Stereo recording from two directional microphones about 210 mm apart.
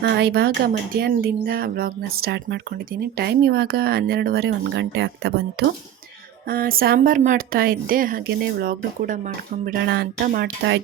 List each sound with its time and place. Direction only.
0.0 s speech: 50° right (ahead or behind)